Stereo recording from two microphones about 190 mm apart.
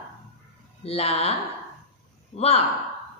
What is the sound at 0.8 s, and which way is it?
Speech, 30° left (ahead or behind).